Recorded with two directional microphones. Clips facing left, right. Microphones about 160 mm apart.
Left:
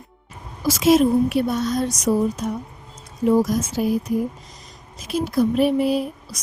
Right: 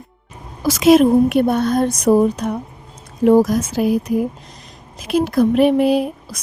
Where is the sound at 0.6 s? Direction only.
65° right (ahead or behind).